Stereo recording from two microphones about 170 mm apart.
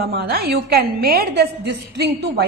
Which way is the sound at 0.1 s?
65° right (ahead or behind).